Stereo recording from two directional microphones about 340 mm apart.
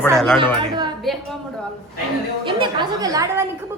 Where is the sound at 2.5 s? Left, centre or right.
Centre.